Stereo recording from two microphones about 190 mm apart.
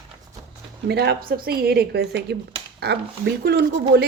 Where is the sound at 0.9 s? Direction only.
55° right (ahead or behind).